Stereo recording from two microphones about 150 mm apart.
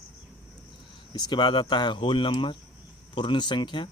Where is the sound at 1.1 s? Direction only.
30° left (ahead or behind).